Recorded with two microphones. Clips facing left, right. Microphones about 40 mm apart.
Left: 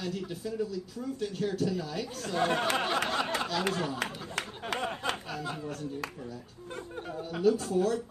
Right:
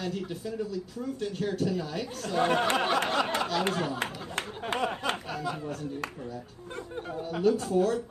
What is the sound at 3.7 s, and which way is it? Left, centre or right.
Speech, centre.